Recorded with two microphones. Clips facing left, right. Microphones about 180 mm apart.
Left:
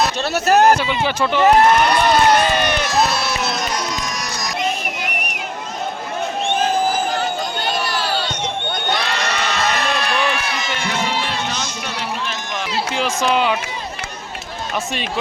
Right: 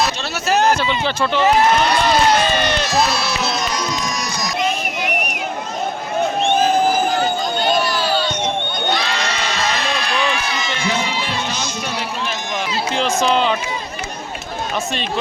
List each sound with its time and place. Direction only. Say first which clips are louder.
0.0 s speech: left 2 dB; 55° left (ahead or behind)
0.7 s speech: left 1 dB; 10° left (ahead or behind)
1.5 s speech: left 2 dB; 60° left (ahead or behind)
2.6 s crowd: even; 15° left (ahead or behind)
2.8 s music: even; 55° left (ahead or behind)
7.9 s crowd: right 3 dB; 65° left (ahead or behind)
12.9 s run: right 2 dB; 10° left (ahead or behind)